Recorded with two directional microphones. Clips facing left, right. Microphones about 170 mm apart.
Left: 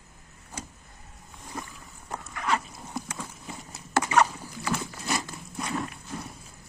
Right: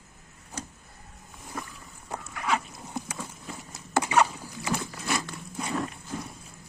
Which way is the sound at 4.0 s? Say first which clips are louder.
Even; 10° right (ahead or behind).